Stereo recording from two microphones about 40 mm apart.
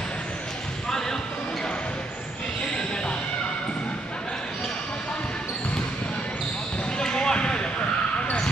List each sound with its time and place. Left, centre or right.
0.8 s basketball bounce: centre
7.0 s basketball bounce: centre